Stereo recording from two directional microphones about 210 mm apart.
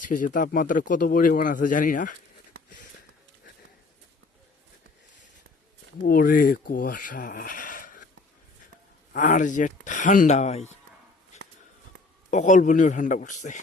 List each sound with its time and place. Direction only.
0.0 s a man's voice: 40° left (ahead or behind)
6.0 s a man's voice: 40° left (ahead or behind)
9.1 s a man's voice: 35° left (ahead or behind)
12.3 s a man's voice: 35° left (ahead or behind)